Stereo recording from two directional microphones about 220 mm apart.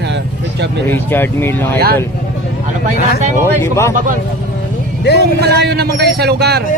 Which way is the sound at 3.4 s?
10° left (ahead or behind).